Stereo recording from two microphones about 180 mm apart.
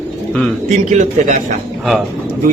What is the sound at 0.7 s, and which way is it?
Speech, 40° right (ahead or behind).